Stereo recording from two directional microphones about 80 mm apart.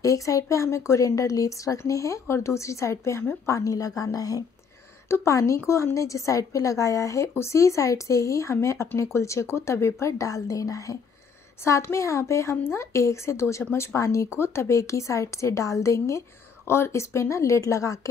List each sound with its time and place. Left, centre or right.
0.0 s a woman's voice: left
5.1 s a woman's voice: left